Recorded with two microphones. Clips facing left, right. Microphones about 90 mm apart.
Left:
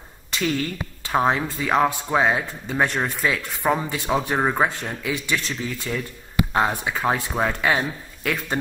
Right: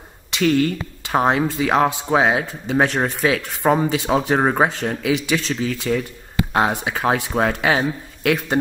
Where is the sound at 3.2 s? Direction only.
70° right (ahead or behind).